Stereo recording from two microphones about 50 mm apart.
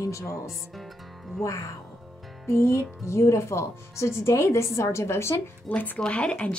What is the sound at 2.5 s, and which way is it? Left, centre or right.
Speech, left.